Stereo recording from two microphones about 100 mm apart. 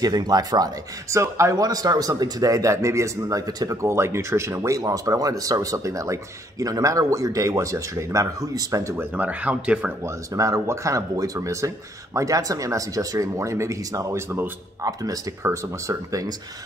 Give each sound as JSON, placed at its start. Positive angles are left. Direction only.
{"t": 0.0, "sound": "speech", "side_deg": -40}
{"t": 1.1, "sound": "speech", "side_deg": -30}
{"t": 3.8, "sound": "speech", "side_deg": -25}
{"t": 9.1, "sound": "speech", "side_deg": -15}
{"t": 10.0, "sound": "speech", "side_deg": -35}